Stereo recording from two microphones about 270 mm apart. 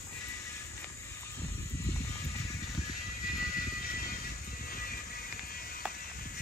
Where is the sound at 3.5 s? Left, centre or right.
Left.